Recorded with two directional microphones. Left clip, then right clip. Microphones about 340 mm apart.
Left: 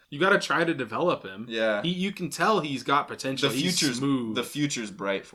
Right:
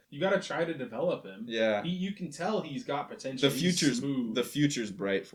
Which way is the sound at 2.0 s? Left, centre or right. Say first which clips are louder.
Left 9 dB; left.